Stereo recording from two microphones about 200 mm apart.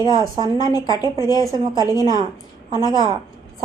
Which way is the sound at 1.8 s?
20° left (ahead or behind).